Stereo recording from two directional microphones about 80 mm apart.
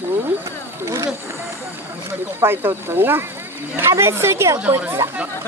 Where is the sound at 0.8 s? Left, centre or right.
Right.